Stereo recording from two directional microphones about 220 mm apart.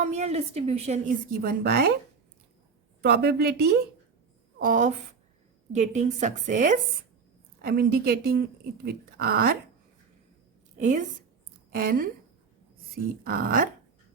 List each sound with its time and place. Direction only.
0.0 s a woman's voice: 30° right (ahead or behind)
1.3 s speech: 45° right (ahead or behind)
3.0 s a woman's voice: 45° right (ahead or behind)
10.8 s a woman's voice: 35° right (ahead or behind)
13.2 s speech: 40° right (ahead or behind)